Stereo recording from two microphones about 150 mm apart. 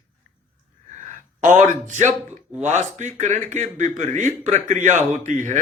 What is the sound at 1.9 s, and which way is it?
Speech, 55° right (ahead or behind).